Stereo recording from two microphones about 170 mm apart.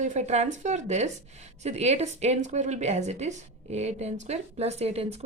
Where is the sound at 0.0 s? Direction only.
45° right (ahead or behind).